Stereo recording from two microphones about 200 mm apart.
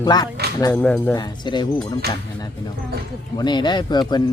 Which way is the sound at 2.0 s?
50° right (ahead or behind).